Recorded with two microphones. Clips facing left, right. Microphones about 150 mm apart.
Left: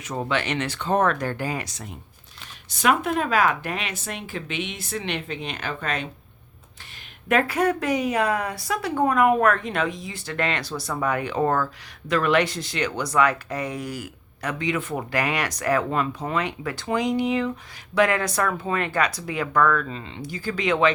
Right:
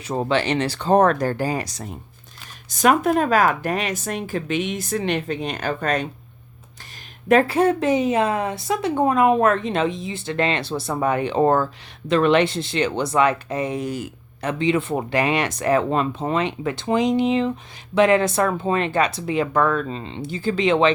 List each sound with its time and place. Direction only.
0.0 s speech: 30° right (ahead or behind)
7.3 s speech: 30° right (ahead or behind)